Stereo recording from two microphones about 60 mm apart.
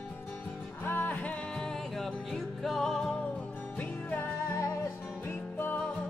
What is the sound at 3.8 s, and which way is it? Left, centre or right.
Music, left.